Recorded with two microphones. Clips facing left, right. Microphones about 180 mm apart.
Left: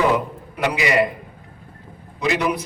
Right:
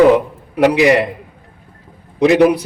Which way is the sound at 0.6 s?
70° right (ahead or behind).